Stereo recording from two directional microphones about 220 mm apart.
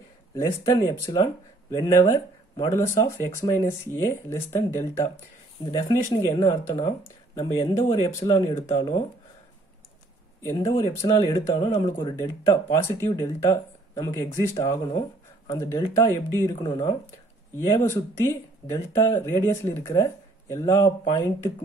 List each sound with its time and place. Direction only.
0.3 s speech: 15° left (ahead or behind)
8.7 s speech: 25° left (ahead or behind)
10.4 s speech: 15° left (ahead or behind)
14.9 s a sound: 25° left (ahead or behind)
15.5 s speech: 10° left (ahead or behind)